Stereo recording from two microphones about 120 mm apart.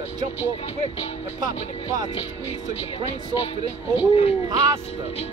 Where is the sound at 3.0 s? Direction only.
55° left (ahead or behind).